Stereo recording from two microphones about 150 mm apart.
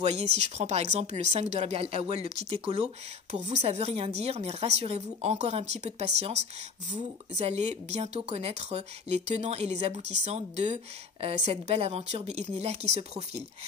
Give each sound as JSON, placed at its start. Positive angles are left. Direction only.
{"t": 0.0, "sound": "a woman's voice", "side_deg": -45}